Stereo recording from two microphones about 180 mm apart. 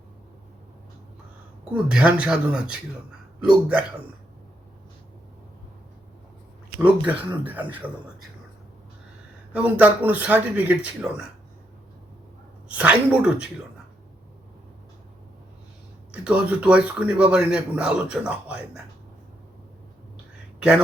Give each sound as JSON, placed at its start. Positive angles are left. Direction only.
{"t": 1.7, "sound": "a man's voice", "side_deg": -5}
{"t": 6.7, "sound": "a man's voice", "side_deg": -5}
{"t": 9.5, "sound": "a man's voice", "side_deg": -10}
{"t": 12.6, "sound": "a man's voice", "side_deg": -5}
{"t": 16.1, "sound": "a man's voice", "side_deg": -5}
{"t": 20.6, "sound": "speech", "side_deg": -5}